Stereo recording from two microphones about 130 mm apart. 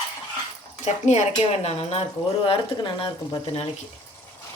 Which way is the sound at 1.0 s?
60° left (ahead or behind).